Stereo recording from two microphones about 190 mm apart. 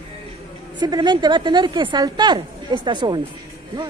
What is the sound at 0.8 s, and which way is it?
Speech, 20° right (ahead or behind).